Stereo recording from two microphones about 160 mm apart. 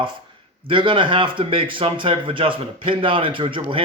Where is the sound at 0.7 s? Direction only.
30° right (ahead or behind).